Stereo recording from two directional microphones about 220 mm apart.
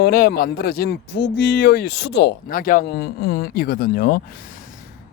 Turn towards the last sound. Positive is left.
turn(degrees=45)  # may be behind; listen again after turning